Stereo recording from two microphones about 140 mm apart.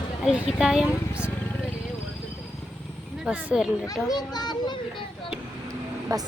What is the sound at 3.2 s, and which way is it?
Speech, 5° right (ahead or behind).